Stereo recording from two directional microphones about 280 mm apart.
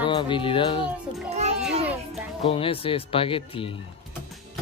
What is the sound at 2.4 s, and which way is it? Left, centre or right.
Speech, centre.